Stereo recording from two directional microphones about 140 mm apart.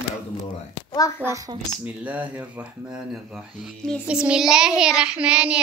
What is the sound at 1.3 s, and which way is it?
Speech, 25° right (ahead or behind).